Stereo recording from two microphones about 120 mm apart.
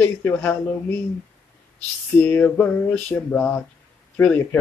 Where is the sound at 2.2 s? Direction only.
15° left (ahead or behind).